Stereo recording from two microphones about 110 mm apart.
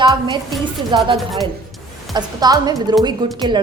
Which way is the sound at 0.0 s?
40° right (ahead or behind).